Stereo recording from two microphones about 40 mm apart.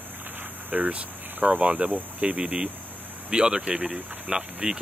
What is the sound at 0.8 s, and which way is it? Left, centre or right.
Speech, right.